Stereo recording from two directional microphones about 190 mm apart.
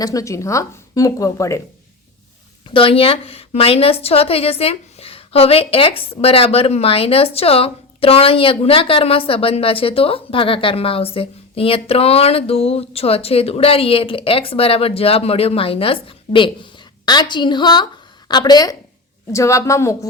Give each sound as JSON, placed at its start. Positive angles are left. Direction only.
{"t": 0.0, "sound": "speech", "side_deg": 15}
{"t": 2.7, "sound": "a woman's voice", "side_deg": 30}